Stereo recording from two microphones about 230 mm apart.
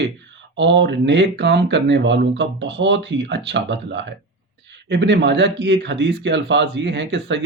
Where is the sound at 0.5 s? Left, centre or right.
Right.